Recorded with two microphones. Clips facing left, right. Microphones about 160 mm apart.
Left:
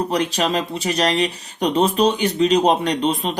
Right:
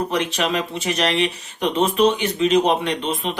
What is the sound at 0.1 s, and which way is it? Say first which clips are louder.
Speech: left 2 dB; 35° left (ahead or behind).